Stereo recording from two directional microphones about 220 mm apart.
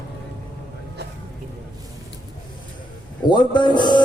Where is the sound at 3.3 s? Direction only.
20° left (ahead or behind).